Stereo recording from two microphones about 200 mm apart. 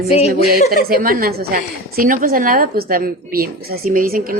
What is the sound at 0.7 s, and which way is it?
A woman's voice, 45° right (ahead or behind).